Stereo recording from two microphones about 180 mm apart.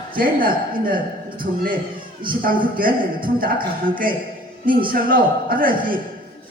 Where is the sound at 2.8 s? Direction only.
50° right (ahead or behind).